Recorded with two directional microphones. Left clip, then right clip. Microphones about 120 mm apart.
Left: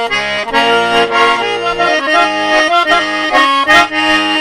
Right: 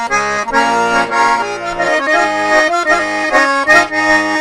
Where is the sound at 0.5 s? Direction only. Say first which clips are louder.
Left 2 dB; 30° left (ahead or behind).